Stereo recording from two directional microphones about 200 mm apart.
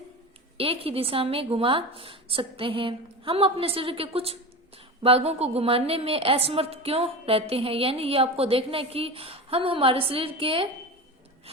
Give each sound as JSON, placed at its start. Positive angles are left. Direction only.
{"t": 0.5, "sound": "a woman's voice", "side_deg": -30}